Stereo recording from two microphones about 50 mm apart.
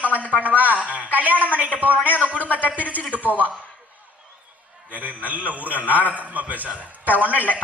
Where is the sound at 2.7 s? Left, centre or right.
Right.